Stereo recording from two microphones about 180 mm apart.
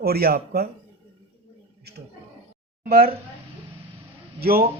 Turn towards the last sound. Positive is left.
turn(degrees=-55)  # may be behind; listen again after turning